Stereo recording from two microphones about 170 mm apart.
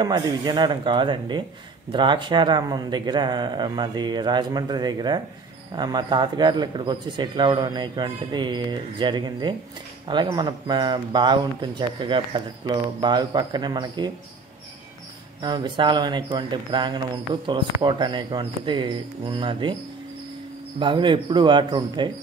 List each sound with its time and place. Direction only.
0.0 s speech: 25° right (ahead or behind)
15.4 s speech: 25° right (ahead or behind)
20.8 s speech: 30° right (ahead or behind)